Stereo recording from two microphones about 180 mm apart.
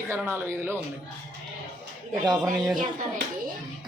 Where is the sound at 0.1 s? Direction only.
15° right (ahead or behind).